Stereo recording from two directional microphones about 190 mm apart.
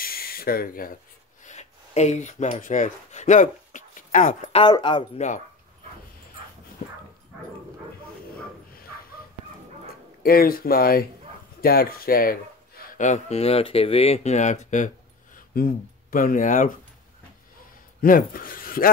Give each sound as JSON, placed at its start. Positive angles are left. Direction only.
{"t": 0.0, "sound": "a sound", "side_deg": 50}
{"t": 1.4, "sound": "speech", "side_deg": 35}
{"t": 10.2, "sound": "speech", "side_deg": 50}
{"t": 18.0, "sound": "speech", "side_deg": 50}